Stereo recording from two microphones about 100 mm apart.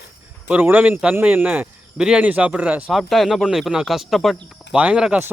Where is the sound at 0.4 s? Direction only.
15° right (ahead or behind).